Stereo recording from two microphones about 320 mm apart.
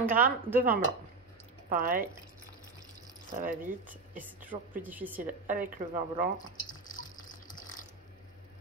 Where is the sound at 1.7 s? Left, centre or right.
Right.